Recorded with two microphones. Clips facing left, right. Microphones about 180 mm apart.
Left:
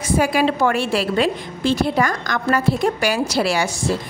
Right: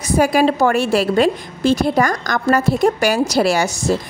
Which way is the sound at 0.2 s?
45° right (ahead or behind).